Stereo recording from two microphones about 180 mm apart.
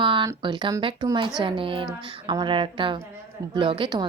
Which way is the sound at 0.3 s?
25° right (ahead or behind).